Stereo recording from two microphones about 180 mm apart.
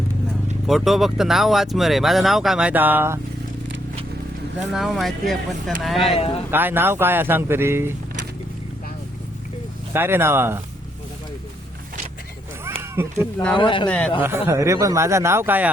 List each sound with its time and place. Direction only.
0.7 s speech: centre (ahead or behind)
4.7 s speech: centre (ahead or behind)
6.1 s speech: 30° left (ahead or behind)
6.5 s speech: 10° right (ahead or behind)
9.9 s speech: 10° right (ahead or behind)
12.6 s a sound: 15° right (ahead or behind)
13.6 s speech: 25° left (ahead or behind)
13.8 s a man's voice: 5° left (ahead or behind)
14.2 s speech: 15° right (ahead or behind)